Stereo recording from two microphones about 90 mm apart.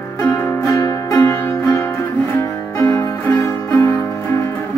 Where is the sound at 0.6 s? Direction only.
35° left (ahead or behind).